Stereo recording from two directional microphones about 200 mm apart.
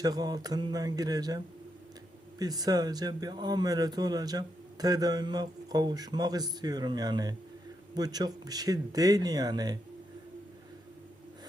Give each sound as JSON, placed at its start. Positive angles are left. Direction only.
{"t": 0.0, "sound": "speech", "side_deg": -20}
{"t": 2.4, "sound": "speech", "side_deg": -20}